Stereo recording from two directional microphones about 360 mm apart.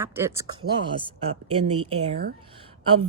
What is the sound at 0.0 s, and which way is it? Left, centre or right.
Speech, centre.